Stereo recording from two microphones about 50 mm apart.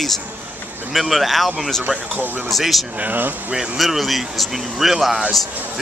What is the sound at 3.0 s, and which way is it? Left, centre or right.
Speech, right.